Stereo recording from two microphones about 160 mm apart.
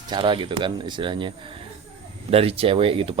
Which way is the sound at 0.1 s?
30° right (ahead or behind).